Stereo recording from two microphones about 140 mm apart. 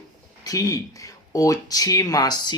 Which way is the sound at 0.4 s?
25° left (ahead or behind).